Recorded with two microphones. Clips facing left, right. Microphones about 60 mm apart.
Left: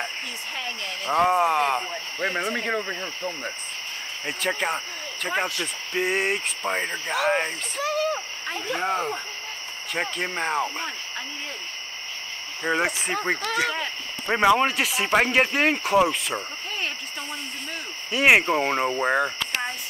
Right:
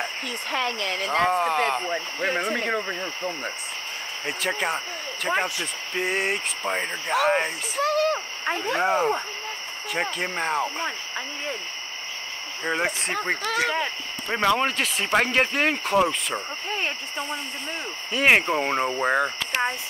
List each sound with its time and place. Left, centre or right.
0.5 s speech: right
1.2 s speech: centre
7.8 s a sound: right
8.8 s speech: centre
12.6 s speech: centre
14.2 s speech: centre
18.1 s speech: centre